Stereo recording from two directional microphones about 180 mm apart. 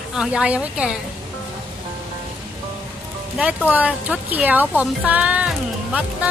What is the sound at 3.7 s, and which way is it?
Speech, 10° right (ahead or behind).